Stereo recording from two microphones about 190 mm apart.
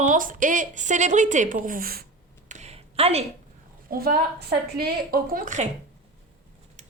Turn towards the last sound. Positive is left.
turn(degrees=-40)  # may be behind; listen again after turning